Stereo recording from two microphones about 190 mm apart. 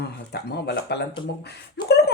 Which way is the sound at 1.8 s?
55° left (ahead or behind).